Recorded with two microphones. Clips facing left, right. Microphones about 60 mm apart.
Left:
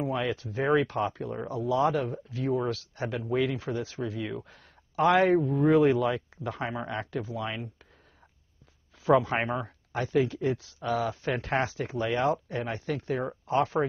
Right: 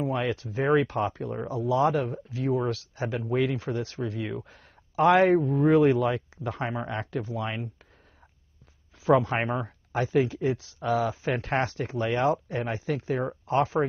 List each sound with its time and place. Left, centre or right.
0.0 s speech: centre
9.0 s speech: centre